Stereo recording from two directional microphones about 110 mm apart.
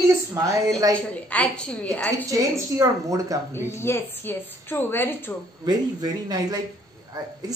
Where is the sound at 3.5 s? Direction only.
25° left (ahead or behind).